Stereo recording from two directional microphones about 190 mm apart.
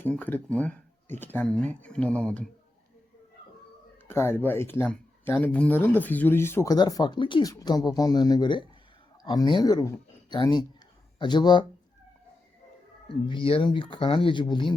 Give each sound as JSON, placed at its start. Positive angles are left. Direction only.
{"t": 0.0, "sound": "speech", "side_deg": 10}
{"t": 4.1, "sound": "speech", "side_deg": 10}
{"t": 13.1, "sound": "speech", "side_deg": 25}